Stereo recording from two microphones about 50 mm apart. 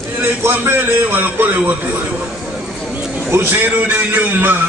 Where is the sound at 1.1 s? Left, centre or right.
Right.